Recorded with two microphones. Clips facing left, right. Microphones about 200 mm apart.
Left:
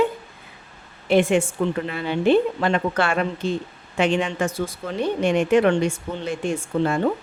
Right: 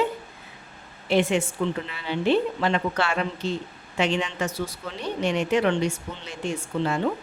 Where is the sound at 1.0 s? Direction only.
50° left (ahead or behind).